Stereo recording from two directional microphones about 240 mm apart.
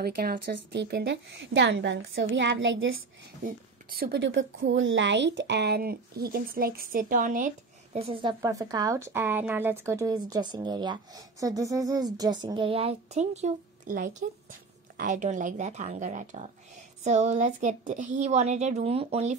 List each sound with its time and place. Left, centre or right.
0.0 s a woman's voice: right
3.4 s speech: right